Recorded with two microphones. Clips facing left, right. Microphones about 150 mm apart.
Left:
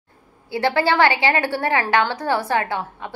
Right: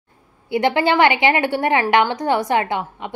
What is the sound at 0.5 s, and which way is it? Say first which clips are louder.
A woman's voice: right 2 dB; 20° right (ahead or behind).